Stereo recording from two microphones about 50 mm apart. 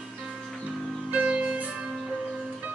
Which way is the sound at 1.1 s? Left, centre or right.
Right.